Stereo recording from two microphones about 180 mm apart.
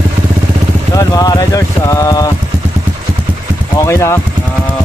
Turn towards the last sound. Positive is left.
turn(degrees=15)  # may be behind; listen again after turning